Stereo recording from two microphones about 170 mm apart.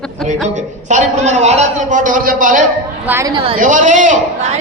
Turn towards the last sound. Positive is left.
turn(degrees=-45)  # may be behind; listen again after turning